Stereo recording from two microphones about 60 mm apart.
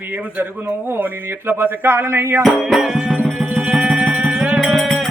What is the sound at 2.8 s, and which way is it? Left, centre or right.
Music, centre.